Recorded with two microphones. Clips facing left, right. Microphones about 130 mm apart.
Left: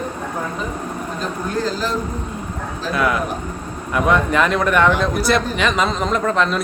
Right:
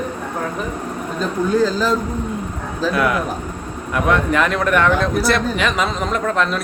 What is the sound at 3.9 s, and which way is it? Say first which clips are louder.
A man's voice: even; centre (ahead or behind).